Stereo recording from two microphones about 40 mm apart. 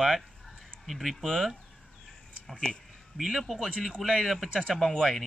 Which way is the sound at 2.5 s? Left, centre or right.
Left.